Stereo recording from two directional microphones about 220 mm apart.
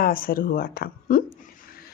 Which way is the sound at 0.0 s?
40° left (ahead or behind).